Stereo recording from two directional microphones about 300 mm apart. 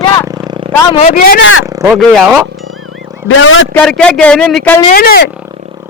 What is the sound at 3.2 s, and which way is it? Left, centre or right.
Speech, left.